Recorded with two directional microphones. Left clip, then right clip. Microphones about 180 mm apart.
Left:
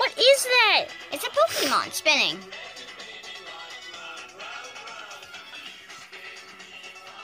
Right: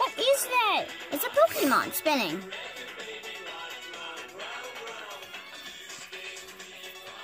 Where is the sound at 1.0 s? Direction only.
30° right (ahead or behind).